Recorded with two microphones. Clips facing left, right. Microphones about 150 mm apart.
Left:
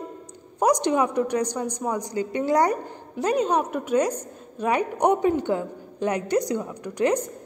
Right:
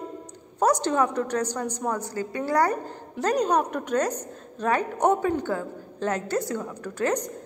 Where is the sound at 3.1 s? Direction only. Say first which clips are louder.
Left 1 dB; 5° left (ahead or behind).